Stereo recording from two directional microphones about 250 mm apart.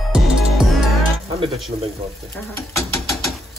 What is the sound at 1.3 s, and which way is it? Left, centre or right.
Speech, right.